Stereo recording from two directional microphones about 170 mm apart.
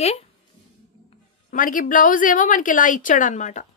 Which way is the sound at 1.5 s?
50° left (ahead or behind).